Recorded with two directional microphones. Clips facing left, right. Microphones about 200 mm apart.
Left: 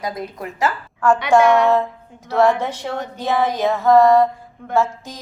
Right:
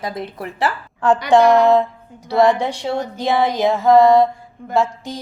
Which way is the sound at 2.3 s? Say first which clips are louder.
Right 2 dB; 15° right (ahead or behind).